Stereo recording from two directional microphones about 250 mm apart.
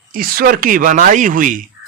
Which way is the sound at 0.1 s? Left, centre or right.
Right.